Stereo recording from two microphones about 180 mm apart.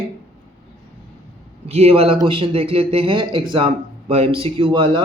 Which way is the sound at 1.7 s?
35° right (ahead or behind).